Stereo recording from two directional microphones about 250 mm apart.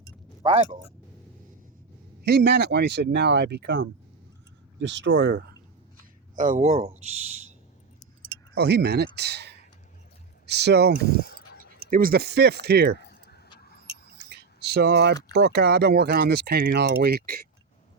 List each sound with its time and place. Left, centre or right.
0.0 s keys jangling: right
2.2 s speech: right
6.3 s speech: right
8.5 s speech: right
11.2 s a sound: left
11.9 s speech: right
13.0 s keys jangling: left
13.6 s vehicle: left
14.3 s speech: right